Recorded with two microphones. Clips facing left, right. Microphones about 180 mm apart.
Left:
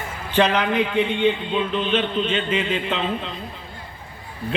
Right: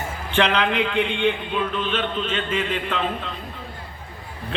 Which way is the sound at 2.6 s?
50° right (ahead or behind).